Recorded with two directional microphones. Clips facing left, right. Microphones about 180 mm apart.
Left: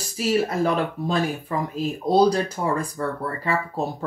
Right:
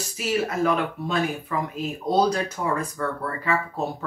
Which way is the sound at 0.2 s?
35° left (ahead or behind).